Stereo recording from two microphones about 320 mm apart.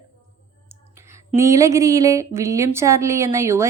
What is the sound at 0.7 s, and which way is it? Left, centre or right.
Speech, centre.